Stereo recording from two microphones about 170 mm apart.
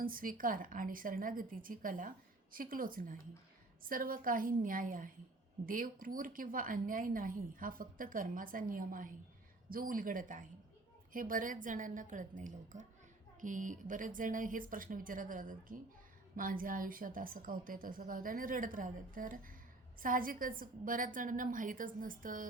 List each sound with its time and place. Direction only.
0.0 s a woman's voice: 55° right (ahead or behind)